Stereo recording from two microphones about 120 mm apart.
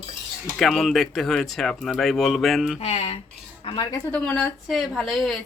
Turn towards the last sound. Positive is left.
turn(degrees=0)  # may be behind; listen again after turning